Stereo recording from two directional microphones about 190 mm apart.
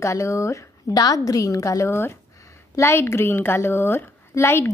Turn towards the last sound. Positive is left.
turn(degrees=15)  # may be behind; listen again after turning